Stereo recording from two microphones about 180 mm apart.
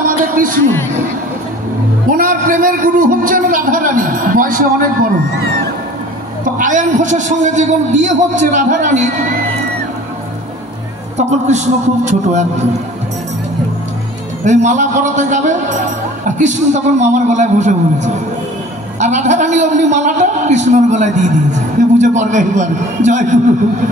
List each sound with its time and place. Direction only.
0.2 s a man's voice: 50° right (ahead or behind)
2.0 s a man's voice: 50° right (ahead or behind)
6.4 s a man's voice: 45° right (ahead or behind)
11.1 s a man's voice: 40° right (ahead or behind)
14.4 s a man's voice: 40° right (ahead or behind)